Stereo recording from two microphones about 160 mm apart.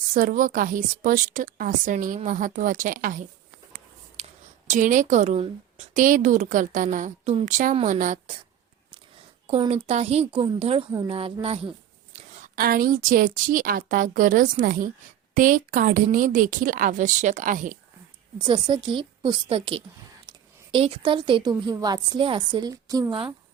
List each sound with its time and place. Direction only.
0.1 s a woman's voice: 60° right (ahead or behind)
4.2 s a woman's voice: 45° right (ahead or behind)
9.5 s a woman's voice: 40° right (ahead or behind)
12.5 s a woman's voice: 65° right (ahead or behind)
18.4 s a woman's voice: 30° right (ahead or behind)
20.2 s a sound: 30° right (ahead or behind)
21.7 s a woman's voice: 25° right (ahead or behind)